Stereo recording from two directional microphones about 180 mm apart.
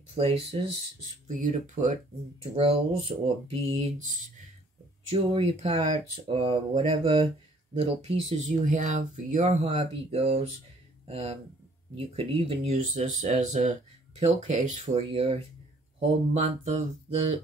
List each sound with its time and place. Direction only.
0.1 s speech: 35° right (ahead or behind)
5.1 s speech: 35° right (ahead or behind)
15.0 s speech: 30° right (ahead or behind)